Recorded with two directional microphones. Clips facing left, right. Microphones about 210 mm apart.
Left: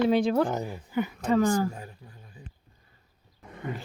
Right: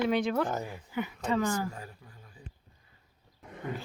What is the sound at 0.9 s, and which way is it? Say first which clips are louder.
Speech: left 6 dB; 40° left (ahead or behind).